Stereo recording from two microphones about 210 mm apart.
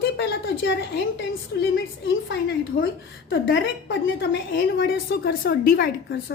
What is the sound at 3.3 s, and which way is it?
A woman's voice, 60° left (ahead or behind).